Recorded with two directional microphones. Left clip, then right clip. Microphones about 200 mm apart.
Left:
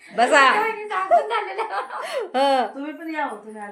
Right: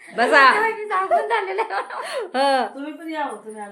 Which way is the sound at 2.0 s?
Centre (ahead or behind).